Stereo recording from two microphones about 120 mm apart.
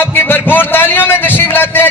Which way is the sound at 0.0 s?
15° left (ahead or behind).